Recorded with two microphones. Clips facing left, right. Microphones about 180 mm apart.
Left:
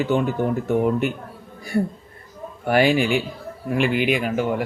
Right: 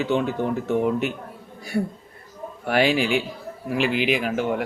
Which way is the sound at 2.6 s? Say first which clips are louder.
Left 3 dB; centre (ahead or behind).